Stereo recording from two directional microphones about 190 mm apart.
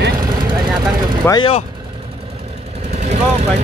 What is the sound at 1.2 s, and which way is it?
Speech, 25° left (ahead or behind).